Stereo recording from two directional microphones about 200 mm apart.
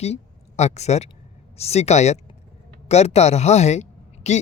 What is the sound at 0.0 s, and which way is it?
A man's voice, 35° left (ahead or behind).